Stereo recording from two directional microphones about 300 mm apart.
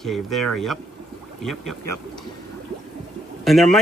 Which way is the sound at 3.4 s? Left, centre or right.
Centre.